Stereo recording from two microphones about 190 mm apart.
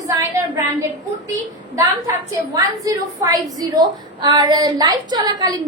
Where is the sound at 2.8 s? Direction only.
20° right (ahead or behind).